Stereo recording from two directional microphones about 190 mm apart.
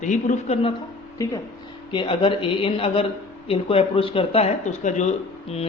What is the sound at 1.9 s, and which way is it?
Speech, 25° left (ahead or behind).